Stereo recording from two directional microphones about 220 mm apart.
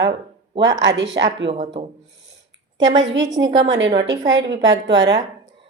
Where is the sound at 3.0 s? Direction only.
55° right (ahead or behind).